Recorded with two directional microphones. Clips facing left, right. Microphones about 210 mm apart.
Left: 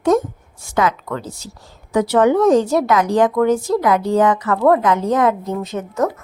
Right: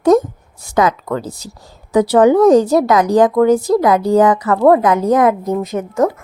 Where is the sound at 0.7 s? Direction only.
35° right (ahead or behind).